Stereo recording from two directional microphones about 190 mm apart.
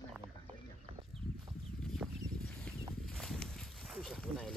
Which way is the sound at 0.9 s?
30° right (ahead or behind).